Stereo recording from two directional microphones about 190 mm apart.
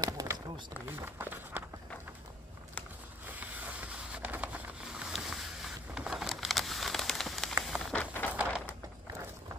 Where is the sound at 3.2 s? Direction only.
10° right (ahead or behind); by 8.3 s 5° left (ahead or behind).